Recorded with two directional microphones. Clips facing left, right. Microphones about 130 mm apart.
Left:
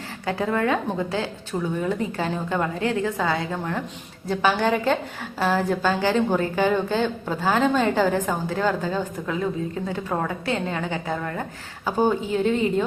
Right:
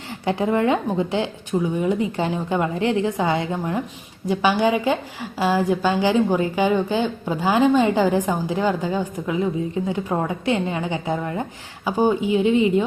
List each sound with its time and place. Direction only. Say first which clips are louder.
0.3 s a woman's voice: right 3 dB; 20° right (ahead or behind)
4.3 s a woman's voice: right 2 dB; 10° right (ahead or behind)